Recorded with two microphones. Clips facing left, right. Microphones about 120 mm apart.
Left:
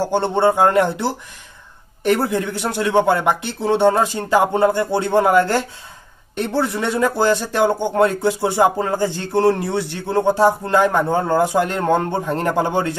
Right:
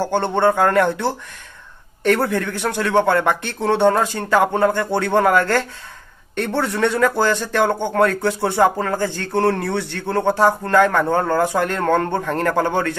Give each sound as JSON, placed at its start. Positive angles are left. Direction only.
{"t": 0.1, "sound": "speech", "side_deg": 15}